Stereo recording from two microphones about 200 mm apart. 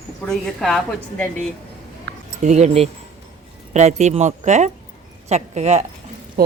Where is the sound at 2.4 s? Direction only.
35° right (ahead or behind).